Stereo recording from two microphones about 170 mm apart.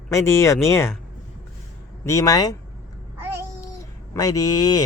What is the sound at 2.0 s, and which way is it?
Speech, 20° left (ahead or behind).